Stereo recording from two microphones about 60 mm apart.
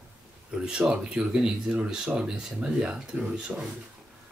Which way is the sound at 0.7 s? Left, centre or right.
Centre.